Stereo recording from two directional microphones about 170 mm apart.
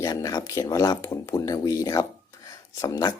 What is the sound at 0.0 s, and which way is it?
Speech, 20° left (ahead or behind).